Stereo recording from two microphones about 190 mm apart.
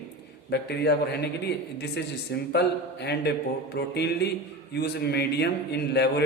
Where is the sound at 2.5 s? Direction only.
60° left (ahead or behind).